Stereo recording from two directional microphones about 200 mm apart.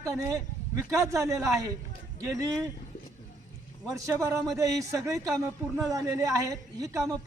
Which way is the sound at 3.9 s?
15° right (ahead or behind).